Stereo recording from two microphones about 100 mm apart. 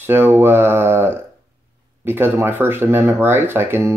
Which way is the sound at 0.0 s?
25° right (ahead or behind).